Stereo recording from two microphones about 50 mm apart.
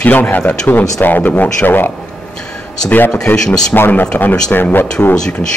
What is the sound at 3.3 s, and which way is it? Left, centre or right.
Speech, left.